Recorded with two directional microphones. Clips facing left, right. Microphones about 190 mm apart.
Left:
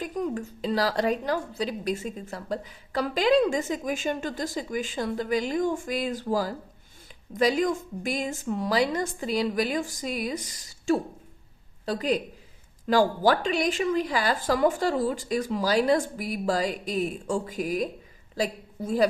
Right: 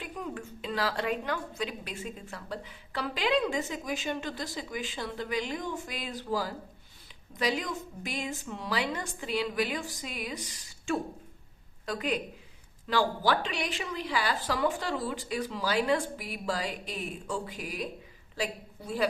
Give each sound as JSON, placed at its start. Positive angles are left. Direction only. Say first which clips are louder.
{"t": 0.0, "sound": "a woman's voice", "louder": "left 8 dB", "side_deg": 40}